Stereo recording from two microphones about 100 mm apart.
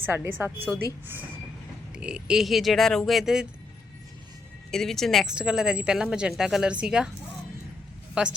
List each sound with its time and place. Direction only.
0.0 s a woman's voice: 20° right (ahead or behind)
2.0 s speech: 10° right (ahead or behind)
4.7 s speech: 5° left (ahead or behind)
5.3 s a woman's voice: 10° right (ahead or behind)
8.2 s a woman's voice: 10° right (ahead or behind)